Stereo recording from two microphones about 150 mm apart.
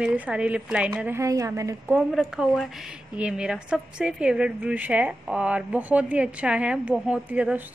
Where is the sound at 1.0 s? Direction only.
20° right (ahead or behind).